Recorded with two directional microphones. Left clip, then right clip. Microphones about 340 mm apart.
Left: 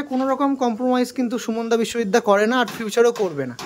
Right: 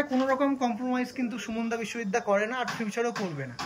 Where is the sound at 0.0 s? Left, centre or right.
Centre.